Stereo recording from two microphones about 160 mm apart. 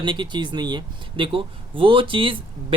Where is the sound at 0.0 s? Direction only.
30° right (ahead or behind).